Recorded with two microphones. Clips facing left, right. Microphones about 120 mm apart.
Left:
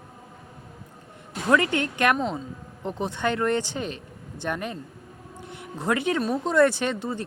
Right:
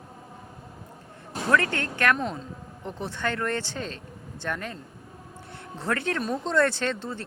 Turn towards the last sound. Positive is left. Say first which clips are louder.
# left 2 dB
turn(degrees=15)  # may be behind; listen again after turning